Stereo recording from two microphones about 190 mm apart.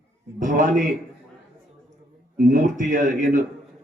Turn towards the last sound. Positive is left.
turn(degrees=-45)  # may be behind; listen again after turning